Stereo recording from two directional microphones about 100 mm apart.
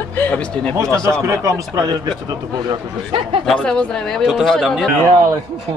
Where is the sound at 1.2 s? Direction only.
35° right (ahead or behind).